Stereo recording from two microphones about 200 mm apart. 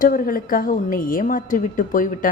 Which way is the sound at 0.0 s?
45° left (ahead or behind).